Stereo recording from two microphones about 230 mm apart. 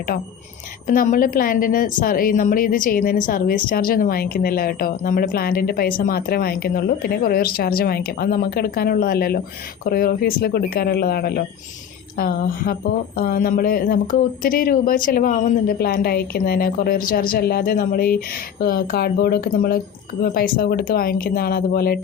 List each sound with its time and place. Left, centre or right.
0.9 s a woman's voice: left